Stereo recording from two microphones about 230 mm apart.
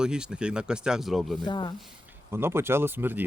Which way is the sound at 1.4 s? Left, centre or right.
Centre.